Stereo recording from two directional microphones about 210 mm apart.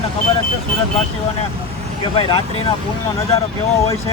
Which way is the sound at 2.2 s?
25° left (ahead or behind).